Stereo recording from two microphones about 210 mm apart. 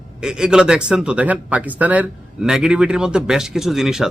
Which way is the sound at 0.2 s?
5° right (ahead or behind).